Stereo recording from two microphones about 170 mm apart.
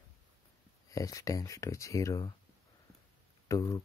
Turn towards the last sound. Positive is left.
turn(degrees=20)  # may be behind; listen again after turning